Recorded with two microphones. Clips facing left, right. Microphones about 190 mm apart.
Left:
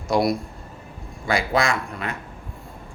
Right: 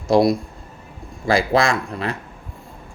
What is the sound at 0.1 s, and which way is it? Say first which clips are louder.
Speech: right 5 dB; 25° right (ahead or behind).